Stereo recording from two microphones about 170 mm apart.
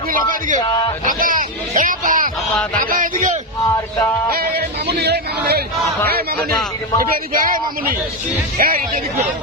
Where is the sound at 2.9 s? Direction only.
50° right (ahead or behind).